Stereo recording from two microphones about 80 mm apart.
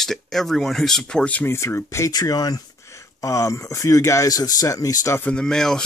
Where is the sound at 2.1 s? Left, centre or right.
Left.